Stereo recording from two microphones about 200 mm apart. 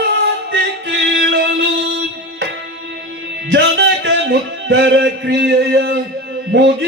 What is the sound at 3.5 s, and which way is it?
Music, 65° right (ahead or behind).